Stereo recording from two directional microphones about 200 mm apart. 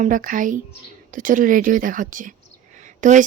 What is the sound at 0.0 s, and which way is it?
Speech, 40° right (ahead or behind).